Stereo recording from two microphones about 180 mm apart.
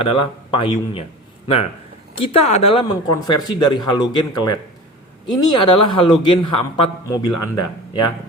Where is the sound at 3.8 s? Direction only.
25° left (ahead or behind).